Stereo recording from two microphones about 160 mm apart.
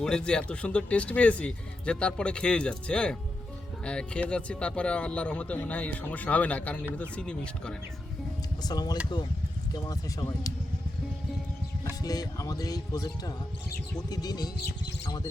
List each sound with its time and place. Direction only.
0.0 s speech: 5° left (ahead or behind)
8.6 s speech: 25° left (ahead or behind)
12.0 s speech: 25° left (ahead or behind)